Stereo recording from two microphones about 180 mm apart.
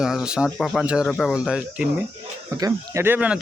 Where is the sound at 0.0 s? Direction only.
5° right (ahead or behind).